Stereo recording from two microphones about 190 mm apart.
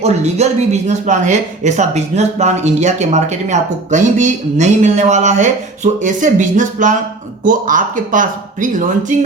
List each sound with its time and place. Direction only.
0.0 s speech: 35° right (ahead or behind)